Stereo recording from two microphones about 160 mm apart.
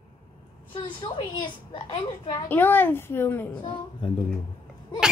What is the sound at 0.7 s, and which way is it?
A woman's voice, 30° left (ahead or behind).